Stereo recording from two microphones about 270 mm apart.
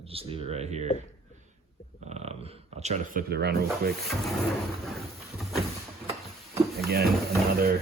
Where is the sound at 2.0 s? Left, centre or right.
Right.